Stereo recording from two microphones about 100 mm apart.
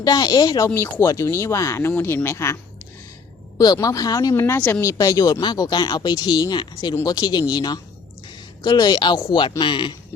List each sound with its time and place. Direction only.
0.0 s speech: 40° left (ahead or behind)
0.7 s speech: 25° left (ahead or behind)
3.6 s speech: 40° left (ahead or behind)
4.4 s speech: 25° left (ahead or behind); by 9.9 s 55° left (ahead or behind)